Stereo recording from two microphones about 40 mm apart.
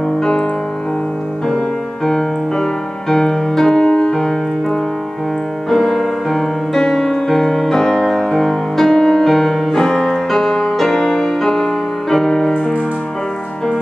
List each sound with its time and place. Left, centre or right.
0.2 s music: centre
2.0 s music: centre
3.8 s piano: left
4.1 s piano: centre
5.7 s music: centre